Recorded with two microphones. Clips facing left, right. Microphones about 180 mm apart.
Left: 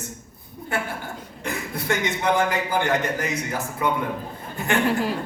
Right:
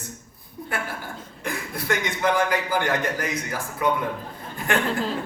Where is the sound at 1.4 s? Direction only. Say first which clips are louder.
Left 1 dB; 25° left (ahead or behind).